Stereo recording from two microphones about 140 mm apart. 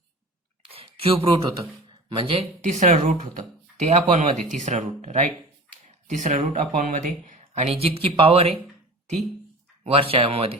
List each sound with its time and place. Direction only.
0.7 s speech: 45° right (ahead or behind)
2.6 s speech: 65° right (ahead or behind); by 8.5 s 45° right (ahead or behind)
9.8 s speech: 40° right (ahead or behind)